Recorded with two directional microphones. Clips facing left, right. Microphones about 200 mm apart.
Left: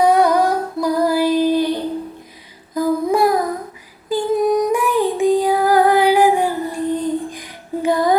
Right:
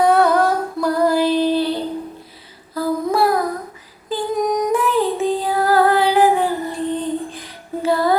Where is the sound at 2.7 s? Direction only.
15° left (ahead or behind).